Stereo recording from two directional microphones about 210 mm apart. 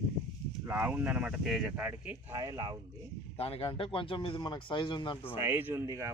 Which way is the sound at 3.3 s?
30° left (ahead or behind).